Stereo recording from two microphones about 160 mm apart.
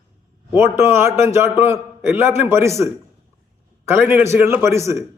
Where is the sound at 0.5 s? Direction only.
15° right (ahead or behind).